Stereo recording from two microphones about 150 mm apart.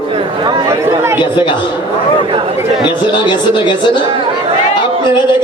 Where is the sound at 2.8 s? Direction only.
30° left (ahead or behind).